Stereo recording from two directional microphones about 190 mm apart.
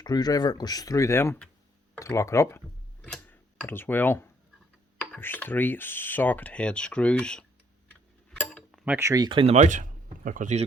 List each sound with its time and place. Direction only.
0.0 s speech: 20° left (ahead or behind); by 10.6 s 45° right (ahead or behind)